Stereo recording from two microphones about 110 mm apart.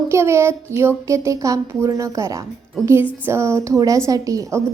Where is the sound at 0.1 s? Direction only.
25° right (ahead or behind).